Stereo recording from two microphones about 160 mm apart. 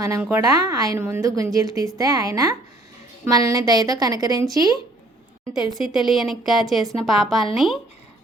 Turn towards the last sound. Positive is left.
turn(degrees=0)  # may be behind; listen again after turning